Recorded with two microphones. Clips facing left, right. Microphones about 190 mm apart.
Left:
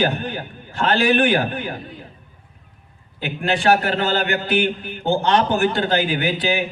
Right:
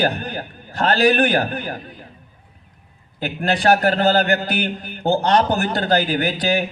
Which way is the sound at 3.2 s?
40° right (ahead or behind).